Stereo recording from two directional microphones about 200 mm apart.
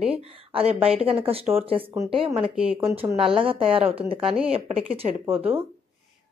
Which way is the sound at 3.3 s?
25° right (ahead or behind).